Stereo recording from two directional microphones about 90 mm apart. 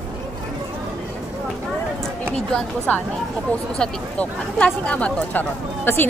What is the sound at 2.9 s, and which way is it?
Speech, 15° left (ahead or behind).